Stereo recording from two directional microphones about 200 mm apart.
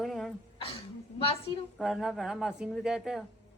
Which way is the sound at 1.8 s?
Centre (ahead or behind).